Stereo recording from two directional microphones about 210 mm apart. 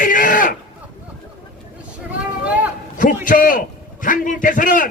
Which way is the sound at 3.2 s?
40° left (ahead or behind).